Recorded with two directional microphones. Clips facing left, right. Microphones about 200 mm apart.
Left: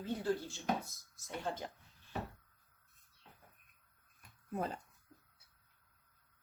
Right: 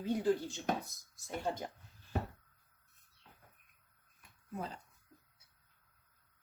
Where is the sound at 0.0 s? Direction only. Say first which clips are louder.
Right 4 dB; 15° right (ahead or behind).